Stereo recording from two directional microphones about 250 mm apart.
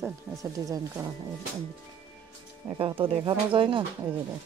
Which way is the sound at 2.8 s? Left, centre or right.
Right.